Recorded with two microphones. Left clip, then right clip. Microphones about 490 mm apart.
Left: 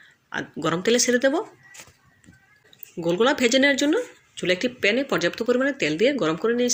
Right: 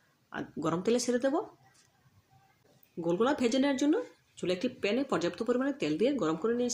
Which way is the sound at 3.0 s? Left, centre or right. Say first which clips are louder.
Left 8 dB; left.